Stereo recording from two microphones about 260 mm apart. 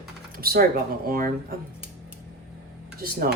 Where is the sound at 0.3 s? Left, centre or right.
Right.